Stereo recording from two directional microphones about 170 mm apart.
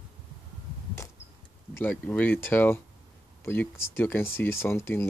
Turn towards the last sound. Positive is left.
turn(degrees=15)  # may be behind; listen again after turning